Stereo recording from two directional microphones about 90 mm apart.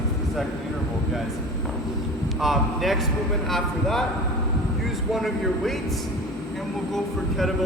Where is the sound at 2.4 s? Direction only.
Centre (ahead or behind).